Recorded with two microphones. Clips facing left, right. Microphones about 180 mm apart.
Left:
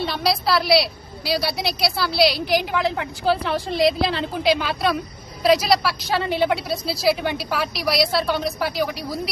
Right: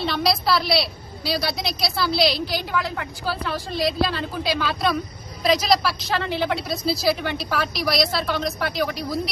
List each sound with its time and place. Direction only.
0.0 s a woman's voice: 5° left (ahead or behind)
2.7 s a woman's voice: 25° left (ahead or behind)
5.4 s a woman's voice: 5° left (ahead or behind)
6.7 s a woman's voice: centre (ahead or behind)